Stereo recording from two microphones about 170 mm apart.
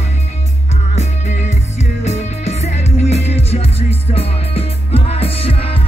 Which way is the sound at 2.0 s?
40° left (ahead or behind).